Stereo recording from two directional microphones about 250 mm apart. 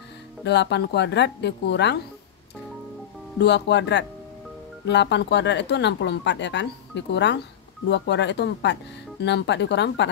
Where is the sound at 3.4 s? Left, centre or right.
Left.